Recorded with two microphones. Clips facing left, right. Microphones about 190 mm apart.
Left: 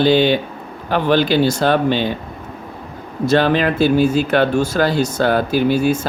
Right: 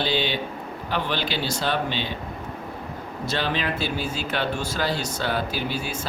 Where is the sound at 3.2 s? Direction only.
50° left (ahead or behind).